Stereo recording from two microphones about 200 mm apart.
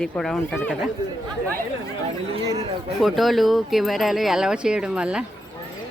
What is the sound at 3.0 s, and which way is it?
Speech, centre (ahead or behind).